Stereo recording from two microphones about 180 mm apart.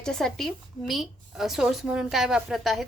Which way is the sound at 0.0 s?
5° left (ahead or behind).